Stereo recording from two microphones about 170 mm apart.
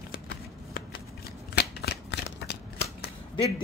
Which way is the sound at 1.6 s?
75° left (ahead or behind).